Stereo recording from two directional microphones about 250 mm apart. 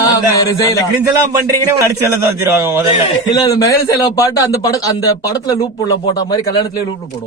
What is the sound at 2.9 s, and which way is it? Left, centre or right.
A man's voice, centre.